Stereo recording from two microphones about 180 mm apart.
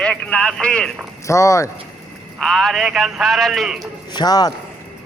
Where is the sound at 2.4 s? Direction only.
Centre (ahead or behind).